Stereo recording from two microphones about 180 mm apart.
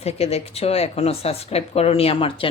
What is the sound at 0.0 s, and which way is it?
Speech, 35° left (ahead or behind).